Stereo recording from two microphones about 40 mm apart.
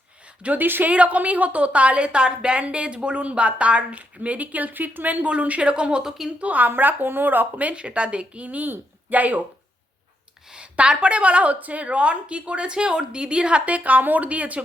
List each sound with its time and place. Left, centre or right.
0.6 s speech: right
0.9 s a woman's voice: right
5.2 s a woman's voice: right
6.0 s speech: centre
6.4 s a woman's voice: right
6.7 s speech: right
7.7 s a woman's voice: right
8.4 s a woman's voice: right
10.5 s a woman's voice: right
13.7 s a woman's voice: right